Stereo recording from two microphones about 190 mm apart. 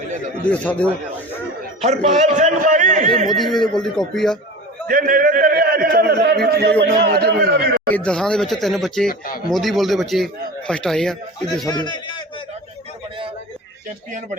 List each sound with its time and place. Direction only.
0.4 s speech: 5° left (ahead or behind)
1.8 s a man's voice: 35° right (ahead or behind)
3.3 s speech: centre (ahead or behind)
4.9 s a man's voice: 45° right (ahead or behind)
7.9 s speech: 5° left (ahead or behind)
9.0 s speech: 50° left (ahead or behind)
9.5 s speech: centre (ahead or behind)
11.6 s a man's voice: 20° left (ahead or behind)